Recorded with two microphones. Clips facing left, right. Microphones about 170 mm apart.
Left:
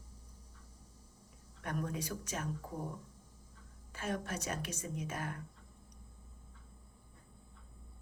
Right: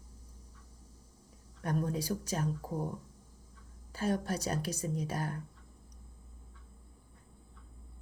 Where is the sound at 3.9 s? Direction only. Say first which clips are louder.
Right 6 dB; 35° right (ahead or behind).